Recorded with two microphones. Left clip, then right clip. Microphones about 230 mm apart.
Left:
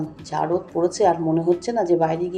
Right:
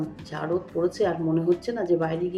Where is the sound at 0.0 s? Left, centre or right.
Centre.